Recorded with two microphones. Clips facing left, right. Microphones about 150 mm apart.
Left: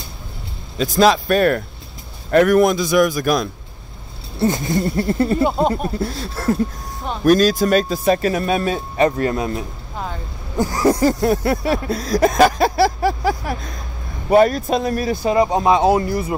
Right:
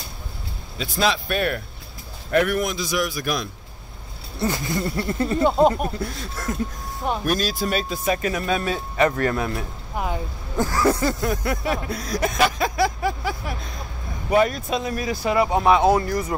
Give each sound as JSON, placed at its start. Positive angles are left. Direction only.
{"t": 0.7, "sound": "a man's voice", "side_deg": 40}
{"t": 4.4, "sound": "speech", "side_deg": 25}
{"t": 7.2, "sound": "speech", "side_deg": 45}
{"t": 9.9, "sound": "vehicle", "side_deg": -15}
{"t": 10.8, "sound": "speech", "side_deg": 35}
{"t": 11.7, "sound": "speech", "side_deg": 35}
{"t": 15.3, "sound": "speech", "side_deg": 20}